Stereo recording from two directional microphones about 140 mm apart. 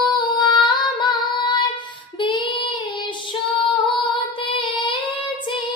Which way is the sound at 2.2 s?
35° left (ahead or behind).